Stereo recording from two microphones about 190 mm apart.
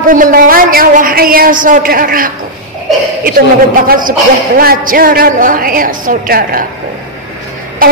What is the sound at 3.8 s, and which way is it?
A man's voice, 45° right (ahead or behind).